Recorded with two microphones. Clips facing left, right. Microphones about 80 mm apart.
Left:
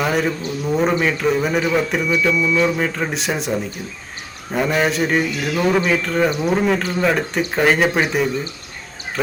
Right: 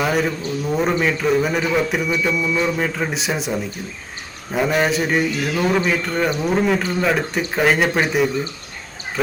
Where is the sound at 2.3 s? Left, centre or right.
Right.